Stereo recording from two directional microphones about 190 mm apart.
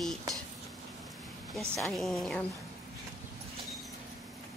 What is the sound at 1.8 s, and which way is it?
Speech, centre (ahead or behind).